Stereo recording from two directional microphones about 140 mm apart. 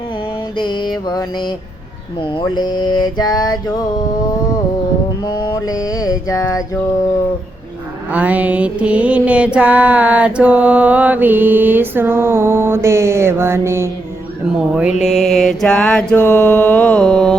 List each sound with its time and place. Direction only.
0.5 s mantra: 35° left (ahead or behind)
8.1 s music: 10° right (ahead or behind)
14.6 s music: 5° right (ahead or behind)
15.0 s mantra: centre (ahead or behind)